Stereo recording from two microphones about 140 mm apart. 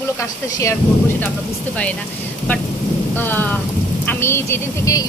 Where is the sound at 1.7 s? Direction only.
10° left (ahead or behind).